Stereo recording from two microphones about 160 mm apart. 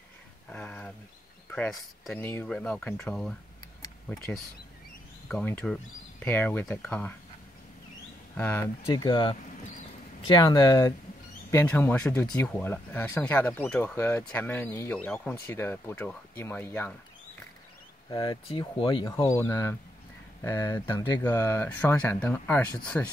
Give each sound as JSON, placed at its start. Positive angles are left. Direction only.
{"t": 0.5, "sound": "a sound", "side_deg": 10}
{"t": 1.5, "sound": "speech", "side_deg": 5}
{"t": 5.3, "sound": "speech", "side_deg": 10}
{"t": 8.4, "sound": "speech", "side_deg": 15}
{"t": 18.1, "sound": "speech", "side_deg": 25}